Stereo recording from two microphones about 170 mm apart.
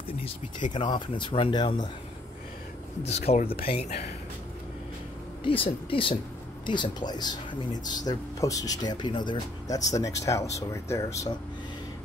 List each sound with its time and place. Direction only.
0.7 s speech: 30° left (ahead or behind)
3.0 s speech: 40° left (ahead or behind)
5.6 s speech: 30° left (ahead or behind)